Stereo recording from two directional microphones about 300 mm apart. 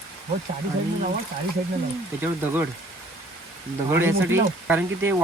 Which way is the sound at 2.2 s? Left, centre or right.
Centre.